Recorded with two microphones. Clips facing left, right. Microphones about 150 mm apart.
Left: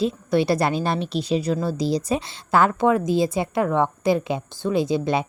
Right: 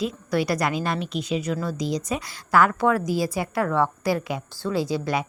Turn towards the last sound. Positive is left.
turn(degrees=25)  # may be behind; listen again after turning